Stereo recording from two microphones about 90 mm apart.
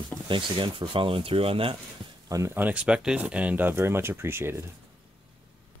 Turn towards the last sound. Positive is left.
turn(degrees=-25)  # may be behind; listen again after turning